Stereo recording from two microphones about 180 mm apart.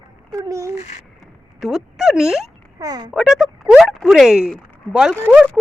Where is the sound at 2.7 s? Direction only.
20° right (ahead or behind).